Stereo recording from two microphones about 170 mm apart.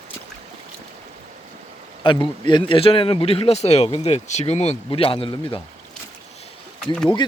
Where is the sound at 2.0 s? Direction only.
30° left (ahead or behind).